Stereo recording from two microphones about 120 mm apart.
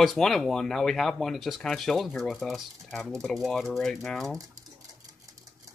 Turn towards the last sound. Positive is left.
turn(degrees=5)  # may be behind; listen again after turning